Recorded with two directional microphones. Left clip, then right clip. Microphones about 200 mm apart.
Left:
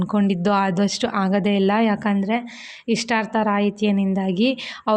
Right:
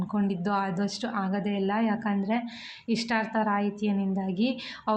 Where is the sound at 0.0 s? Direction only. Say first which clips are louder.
Left 9 dB; 40° left (ahead or behind).